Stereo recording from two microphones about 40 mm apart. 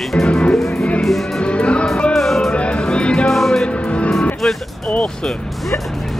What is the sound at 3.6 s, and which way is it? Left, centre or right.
Music, left.